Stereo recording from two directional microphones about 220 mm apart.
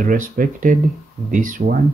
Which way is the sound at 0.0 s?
40° right (ahead or behind).